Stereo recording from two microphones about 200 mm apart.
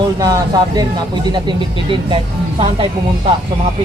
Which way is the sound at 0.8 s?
20° right (ahead or behind).